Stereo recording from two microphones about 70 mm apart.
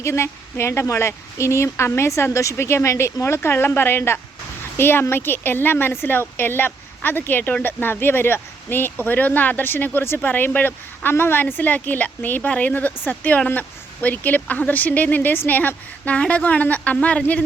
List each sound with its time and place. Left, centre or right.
0.0 s speech: left; by 17.4 s centre